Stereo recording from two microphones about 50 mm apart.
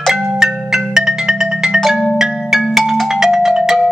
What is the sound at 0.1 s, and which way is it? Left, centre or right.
Marimba, centre.